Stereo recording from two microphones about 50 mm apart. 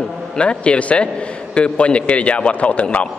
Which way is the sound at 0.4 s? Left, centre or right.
Left.